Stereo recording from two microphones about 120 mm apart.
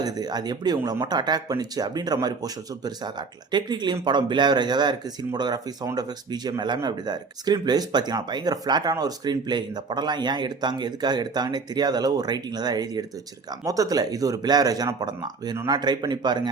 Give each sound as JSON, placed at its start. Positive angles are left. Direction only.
{"t": 0.0, "sound": "speech", "side_deg": -35}